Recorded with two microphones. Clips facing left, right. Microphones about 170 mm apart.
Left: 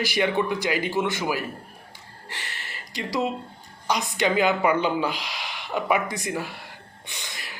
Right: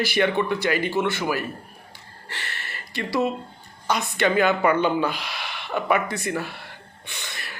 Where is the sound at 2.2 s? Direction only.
15° left (ahead or behind).